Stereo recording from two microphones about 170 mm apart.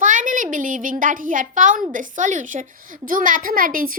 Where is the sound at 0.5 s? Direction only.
50° right (ahead or behind).